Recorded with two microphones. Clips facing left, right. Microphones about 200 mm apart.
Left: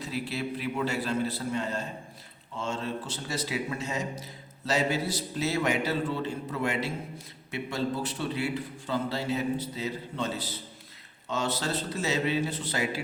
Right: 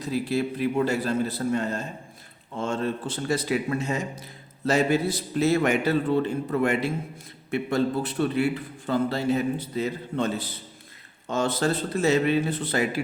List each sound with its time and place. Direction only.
0.0 s a man's voice: 45° right (ahead or behind)